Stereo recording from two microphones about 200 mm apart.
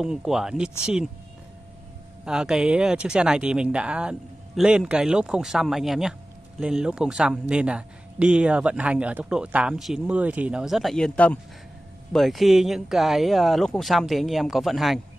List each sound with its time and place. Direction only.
0.0 s speech: 5° right (ahead or behind)
2.2 s speech: 5° right (ahead or behind)